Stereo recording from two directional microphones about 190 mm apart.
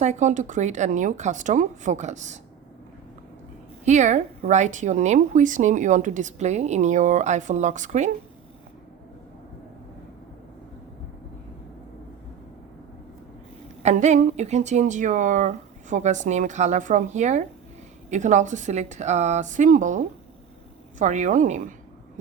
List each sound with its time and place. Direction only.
0.0 s a woman's voice: 40° right (ahead or behind)
3.8 s a woman's voice: 40° right (ahead or behind)
13.8 s a woman's voice: 35° right (ahead or behind)